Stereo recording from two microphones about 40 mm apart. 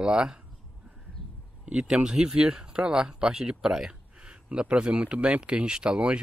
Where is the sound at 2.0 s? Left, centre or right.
Centre.